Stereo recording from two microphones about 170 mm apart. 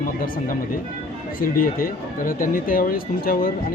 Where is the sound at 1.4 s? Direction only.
55° left (ahead or behind).